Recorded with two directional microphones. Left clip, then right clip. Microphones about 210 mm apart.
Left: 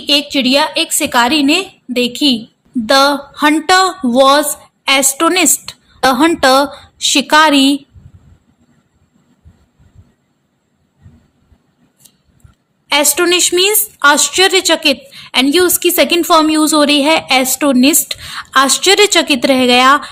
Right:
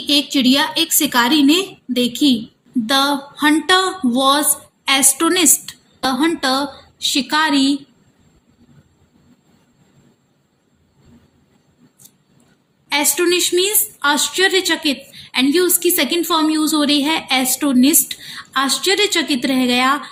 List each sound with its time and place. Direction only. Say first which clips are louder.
0.1 s a woman's voice: left 4 dB; 30° left (ahead or behind)
12.9 s a woman's voice: left 5 dB; 40° left (ahead or behind)